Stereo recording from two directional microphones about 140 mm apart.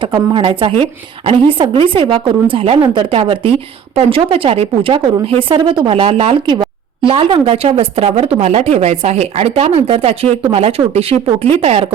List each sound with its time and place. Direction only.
0.0 s speech: 35° right (ahead or behind)